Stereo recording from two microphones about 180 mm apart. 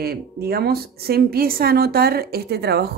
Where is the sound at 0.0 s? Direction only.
60° right (ahead or behind).